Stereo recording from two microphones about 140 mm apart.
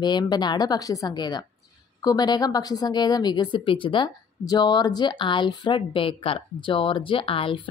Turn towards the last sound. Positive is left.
turn(degrees=40)  # may be behind; listen again after turning